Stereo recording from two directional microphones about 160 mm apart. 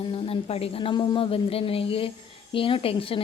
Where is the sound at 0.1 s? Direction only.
35° left (ahead or behind).